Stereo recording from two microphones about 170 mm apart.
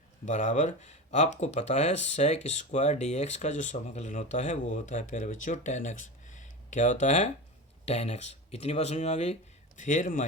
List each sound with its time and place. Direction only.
0.3 s speech: 45° left (ahead or behind)